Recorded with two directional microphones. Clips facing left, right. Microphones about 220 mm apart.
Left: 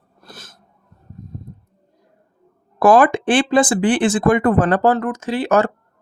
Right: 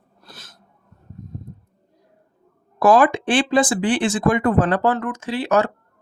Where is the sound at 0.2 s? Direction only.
50° left (ahead or behind).